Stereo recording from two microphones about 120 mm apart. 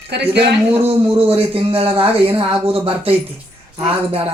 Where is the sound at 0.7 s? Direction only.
55° right (ahead or behind).